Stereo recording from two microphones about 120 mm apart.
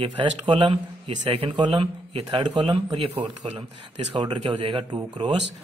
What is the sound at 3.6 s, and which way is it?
Speech, 40° right (ahead or behind).